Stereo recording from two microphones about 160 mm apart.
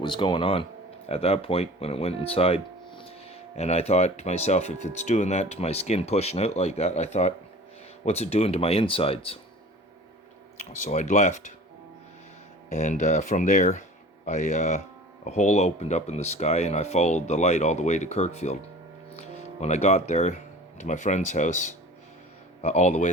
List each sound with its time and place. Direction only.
0.0 s speech: 30° left (ahead or behind)
10.8 s speech: 50° left (ahead or behind)
12.7 s speech: 50° left (ahead or behind)
19.5 s speech: 45° left (ahead or behind)